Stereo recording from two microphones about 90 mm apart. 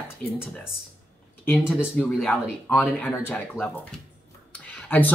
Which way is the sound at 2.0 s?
15° left (ahead or behind).